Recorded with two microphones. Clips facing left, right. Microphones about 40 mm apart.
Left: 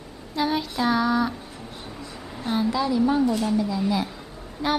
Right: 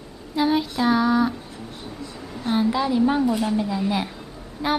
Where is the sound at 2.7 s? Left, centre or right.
Right.